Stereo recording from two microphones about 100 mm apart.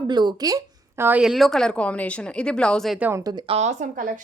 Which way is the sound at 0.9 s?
20° right (ahead or behind).